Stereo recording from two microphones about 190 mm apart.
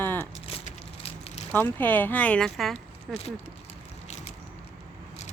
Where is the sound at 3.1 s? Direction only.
30° left (ahead or behind).